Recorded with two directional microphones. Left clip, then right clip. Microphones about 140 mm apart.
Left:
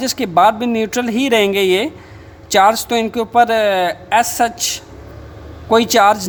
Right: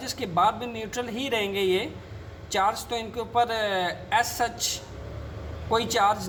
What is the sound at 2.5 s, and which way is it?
Speech, 90° left.